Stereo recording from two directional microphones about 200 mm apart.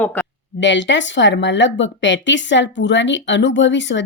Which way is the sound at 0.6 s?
65° left (ahead or behind).